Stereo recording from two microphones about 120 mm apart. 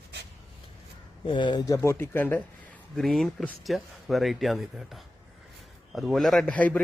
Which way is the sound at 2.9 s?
Centre (ahead or behind).